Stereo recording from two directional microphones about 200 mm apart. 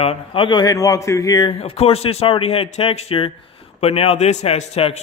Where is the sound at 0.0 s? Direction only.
30° left (ahead or behind).